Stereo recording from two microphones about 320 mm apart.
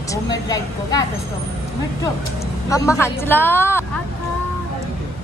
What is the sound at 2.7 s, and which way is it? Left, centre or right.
A woman's voice, centre.